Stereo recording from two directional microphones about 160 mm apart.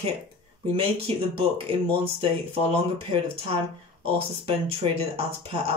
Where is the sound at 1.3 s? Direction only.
35° right (ahead or behind).